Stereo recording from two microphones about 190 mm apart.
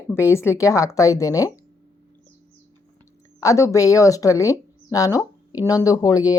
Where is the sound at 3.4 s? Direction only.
15° left (ahead or behind).